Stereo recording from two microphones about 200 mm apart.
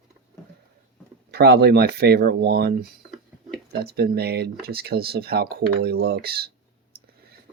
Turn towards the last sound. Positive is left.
turn(degrees=-50)  # may be behind; listen again after turning